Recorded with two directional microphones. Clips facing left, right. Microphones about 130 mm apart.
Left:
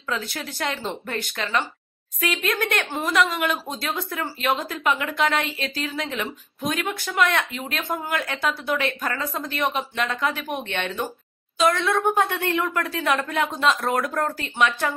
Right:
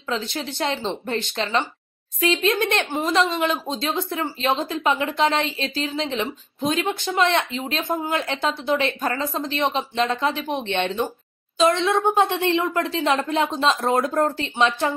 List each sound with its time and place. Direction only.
0.1 s a woman's voice: 25° right (ahead or behind)